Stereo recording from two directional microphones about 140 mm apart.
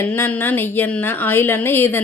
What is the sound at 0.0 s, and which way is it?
Speech, 15° left (ahead or behind).